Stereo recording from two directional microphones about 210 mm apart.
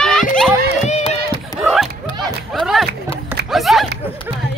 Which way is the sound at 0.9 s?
30° left (ahead or behind).